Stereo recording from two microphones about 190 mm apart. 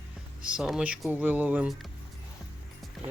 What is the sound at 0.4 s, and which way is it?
Speech, 5° right (ahead or behind).